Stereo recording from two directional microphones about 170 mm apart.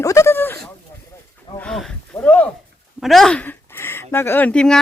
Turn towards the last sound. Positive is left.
turn(degrees=5)  # may be behind; listen again after turning